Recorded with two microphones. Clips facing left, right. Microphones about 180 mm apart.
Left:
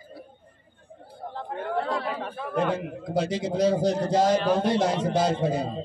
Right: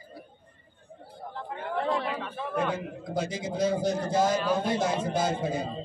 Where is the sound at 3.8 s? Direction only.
80° left.